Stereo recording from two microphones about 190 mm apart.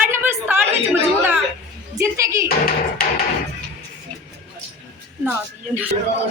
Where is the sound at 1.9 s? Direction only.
15° right (ahead or behind).